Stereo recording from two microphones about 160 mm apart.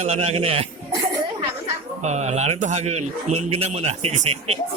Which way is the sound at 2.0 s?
45° right (ahead or behind).